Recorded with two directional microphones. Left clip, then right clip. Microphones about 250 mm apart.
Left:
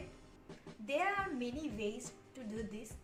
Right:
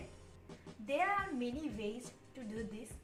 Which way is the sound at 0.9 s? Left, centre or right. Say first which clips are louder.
Right 1 dB; centre.